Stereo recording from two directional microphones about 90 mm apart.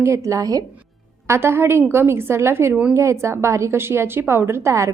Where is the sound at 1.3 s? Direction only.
25° right (ahead or behind).